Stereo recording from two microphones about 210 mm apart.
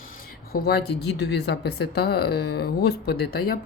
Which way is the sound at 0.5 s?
50° left (ahead or behind).